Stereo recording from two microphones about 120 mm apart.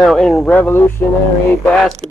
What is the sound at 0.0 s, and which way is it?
Speech, centre (ahead or behind).